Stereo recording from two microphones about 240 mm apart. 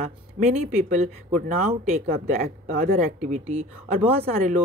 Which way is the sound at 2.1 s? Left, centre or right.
Right.